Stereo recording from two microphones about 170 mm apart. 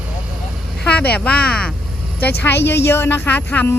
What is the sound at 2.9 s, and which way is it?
Speech, 15° left (ahead or behind).